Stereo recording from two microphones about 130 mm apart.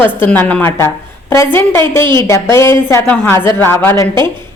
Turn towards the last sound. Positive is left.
turn(degrees=20)  # may be behind; listen again after turning